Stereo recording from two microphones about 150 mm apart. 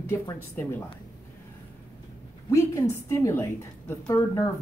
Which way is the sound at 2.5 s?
20° left (ahead or behind).